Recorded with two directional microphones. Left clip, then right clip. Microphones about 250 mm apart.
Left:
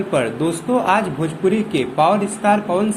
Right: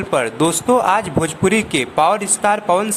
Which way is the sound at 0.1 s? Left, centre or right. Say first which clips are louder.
Right 4 dB; right.